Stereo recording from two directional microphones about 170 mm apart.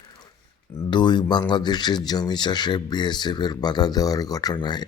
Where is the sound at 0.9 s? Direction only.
25° left (ahead or behind).